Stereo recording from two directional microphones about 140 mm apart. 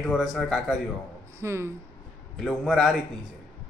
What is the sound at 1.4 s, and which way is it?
Speech, 20° right (ahead or behind).